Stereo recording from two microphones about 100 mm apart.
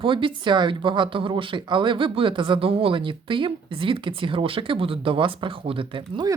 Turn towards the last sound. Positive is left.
turn(degrees=-55)  # may be behind; listen again after turning